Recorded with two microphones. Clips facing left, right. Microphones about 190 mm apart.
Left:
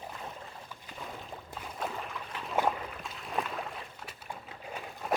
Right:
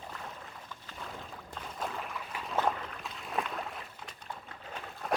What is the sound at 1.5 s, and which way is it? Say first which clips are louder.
Boat: left 1 dB; centre (ahead or behind).